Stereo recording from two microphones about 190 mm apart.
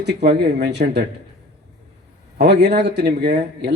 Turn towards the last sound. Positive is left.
turn(degrees=-60)  # may be behind; listen again after turning